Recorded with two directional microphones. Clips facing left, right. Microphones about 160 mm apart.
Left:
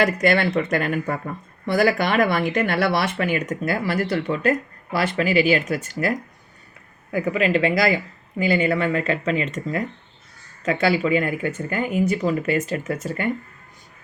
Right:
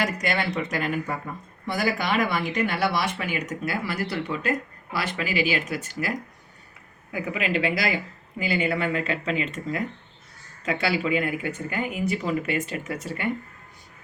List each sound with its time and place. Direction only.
0.0 s speech: 55° left (ahead or behind)